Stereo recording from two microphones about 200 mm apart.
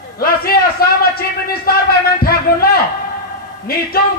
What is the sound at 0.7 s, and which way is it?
Speech, 50° left (ahead or behind).